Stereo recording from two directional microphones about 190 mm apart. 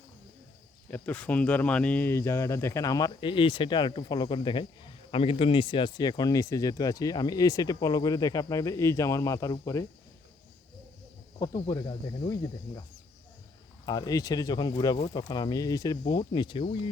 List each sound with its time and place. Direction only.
0.9 s speech: 10° left (ahead or behind)
11.3 s speech: 20° left (ahead or behind)
13.8 s speech: 20° left (ahead or behind)